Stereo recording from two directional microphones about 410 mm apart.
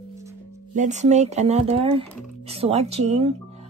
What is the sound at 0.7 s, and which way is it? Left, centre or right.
Speech, centre.